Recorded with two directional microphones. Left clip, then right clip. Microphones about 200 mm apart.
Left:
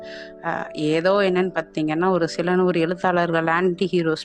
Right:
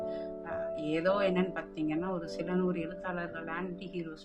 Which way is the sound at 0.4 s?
45° left (ahead or behind).